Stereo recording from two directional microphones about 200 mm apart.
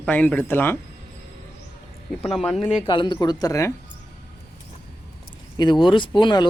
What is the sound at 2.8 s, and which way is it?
Speech, 25° left (ahead or behind).